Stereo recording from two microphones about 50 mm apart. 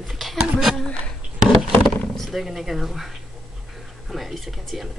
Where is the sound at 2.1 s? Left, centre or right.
Centre.